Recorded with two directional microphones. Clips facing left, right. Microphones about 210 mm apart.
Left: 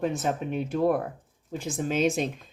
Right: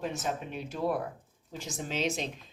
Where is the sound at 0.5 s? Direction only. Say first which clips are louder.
Left 9 dB; 55° left (ahead or behind).